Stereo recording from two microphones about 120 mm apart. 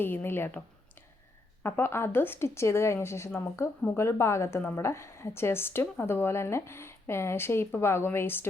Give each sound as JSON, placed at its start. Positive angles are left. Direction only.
{"t": 0.0, "sound": "speech", "side_deg": 20}
{"t": 1.6, "sound": "speech", "side_deg": 20}